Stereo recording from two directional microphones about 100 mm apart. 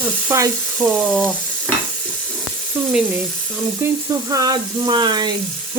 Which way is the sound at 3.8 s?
30° right (ahead or behind).